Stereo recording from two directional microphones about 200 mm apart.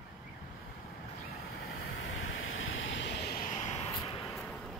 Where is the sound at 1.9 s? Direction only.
85° left; by 3.9 s 35° left (ahead or behind).